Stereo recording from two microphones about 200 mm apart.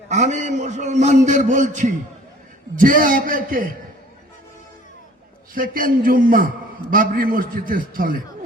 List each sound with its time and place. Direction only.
0.1 s a man's voice: 35° right (ahead or behind)
5.5 s a man's voice: 45° right (ahead or behind)